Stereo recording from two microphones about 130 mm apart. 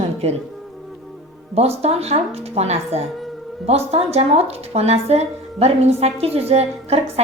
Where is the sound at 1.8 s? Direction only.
55° right (ahead or behind).